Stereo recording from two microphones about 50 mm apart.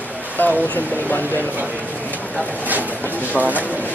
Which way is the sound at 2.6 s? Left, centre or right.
Right.